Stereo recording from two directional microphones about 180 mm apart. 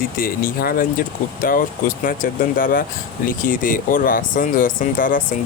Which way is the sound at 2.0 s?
50° left (ahead or behind).